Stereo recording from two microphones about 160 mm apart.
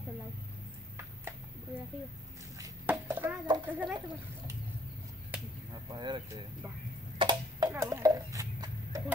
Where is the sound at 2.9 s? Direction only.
10° right (ahead or behind).